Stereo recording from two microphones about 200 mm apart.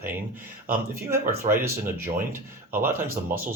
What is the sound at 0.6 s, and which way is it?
Speech, 45° right (ahead or behind).